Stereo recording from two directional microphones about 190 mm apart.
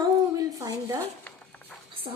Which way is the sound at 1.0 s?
10° left (ahead or behind).